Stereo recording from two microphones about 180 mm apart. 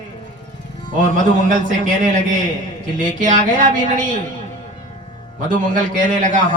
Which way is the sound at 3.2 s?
45° right (ahead or behind).